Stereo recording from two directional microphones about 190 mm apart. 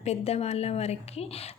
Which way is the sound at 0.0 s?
35° left (ahead or behind).